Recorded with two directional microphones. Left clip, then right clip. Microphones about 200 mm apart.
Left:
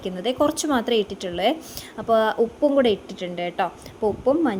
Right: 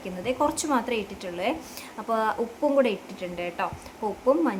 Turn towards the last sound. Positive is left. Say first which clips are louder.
# left 3 dB
turn(degrees=20)  # may be behind; listen again after turning